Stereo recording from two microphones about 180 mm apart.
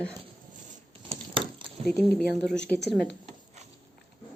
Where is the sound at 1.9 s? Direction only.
5° left (ahead or behind).